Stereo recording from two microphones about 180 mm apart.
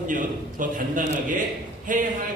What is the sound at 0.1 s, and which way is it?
A man's voice, 50° right (ahead or behind).